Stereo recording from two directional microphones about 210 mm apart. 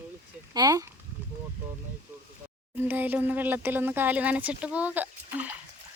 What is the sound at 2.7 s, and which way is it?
Speech, 10° right (ahead or behind).